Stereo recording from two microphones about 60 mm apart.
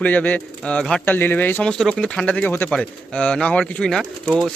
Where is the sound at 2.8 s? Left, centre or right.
Centre.